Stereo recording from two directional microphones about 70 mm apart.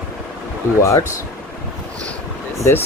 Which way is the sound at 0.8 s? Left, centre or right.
Left.